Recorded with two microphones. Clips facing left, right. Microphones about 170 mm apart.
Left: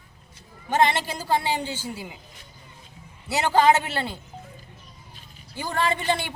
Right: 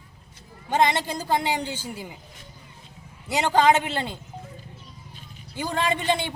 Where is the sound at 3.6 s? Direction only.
20° right (ahead or behind).